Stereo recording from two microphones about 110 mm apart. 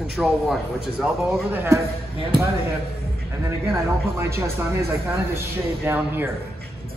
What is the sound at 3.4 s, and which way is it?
A man's voice, 25° right (ahead or behind).